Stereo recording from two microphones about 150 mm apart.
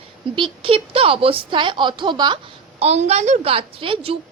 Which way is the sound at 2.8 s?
45° right (ahead or behind).